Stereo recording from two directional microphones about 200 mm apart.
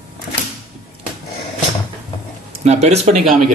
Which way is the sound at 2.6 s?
35° right (ahead or behind).